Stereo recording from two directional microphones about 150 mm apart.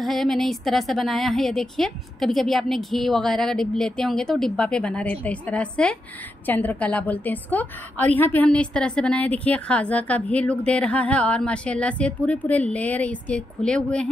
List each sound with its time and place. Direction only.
0.0 s a woman's voice: centre (ahead or behind)